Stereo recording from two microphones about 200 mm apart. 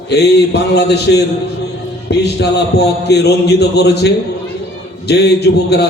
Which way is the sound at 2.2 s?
55° left (ahead or behind).